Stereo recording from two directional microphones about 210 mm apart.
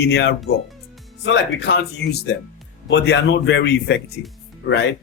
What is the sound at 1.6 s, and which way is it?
A man's voice, 55° left (ahead or behind).